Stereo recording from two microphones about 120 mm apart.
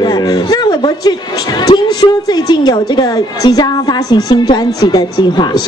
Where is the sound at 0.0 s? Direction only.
35° left (ahead or behind).